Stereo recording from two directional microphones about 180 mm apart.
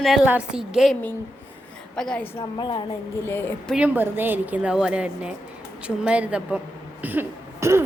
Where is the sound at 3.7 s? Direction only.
10° right (ahead or behind).